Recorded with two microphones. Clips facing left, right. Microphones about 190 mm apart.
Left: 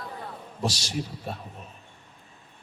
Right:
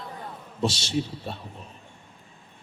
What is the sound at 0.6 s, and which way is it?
Speech, 25° right (ahead or behind).